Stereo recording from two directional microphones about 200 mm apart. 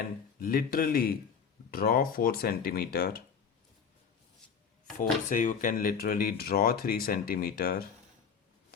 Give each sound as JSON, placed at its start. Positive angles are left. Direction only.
{"t": 0.3, "sound": "speech", "side_deg": 45}
{"t": 4.9, "sound": "speech", "side_deg": 40}